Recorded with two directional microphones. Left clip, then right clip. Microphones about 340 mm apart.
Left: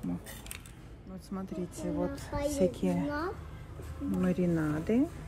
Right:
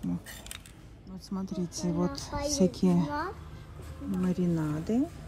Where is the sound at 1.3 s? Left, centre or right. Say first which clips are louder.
Right 3 dB; centre.